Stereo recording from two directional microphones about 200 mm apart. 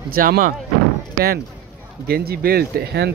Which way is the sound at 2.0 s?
50° right (ahead or behind).